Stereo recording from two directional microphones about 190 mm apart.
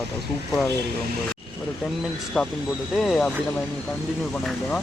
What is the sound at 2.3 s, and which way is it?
Speech, centre (ahead or behind).